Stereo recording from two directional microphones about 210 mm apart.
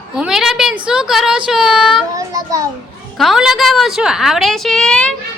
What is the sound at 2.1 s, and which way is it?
Speech, 15° right (ahead or behind).